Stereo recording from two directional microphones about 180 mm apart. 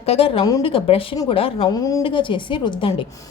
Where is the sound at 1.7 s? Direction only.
20° left (ahead or behind).